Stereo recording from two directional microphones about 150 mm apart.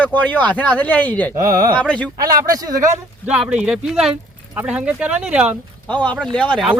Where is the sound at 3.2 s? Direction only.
5° right (ahead or behind).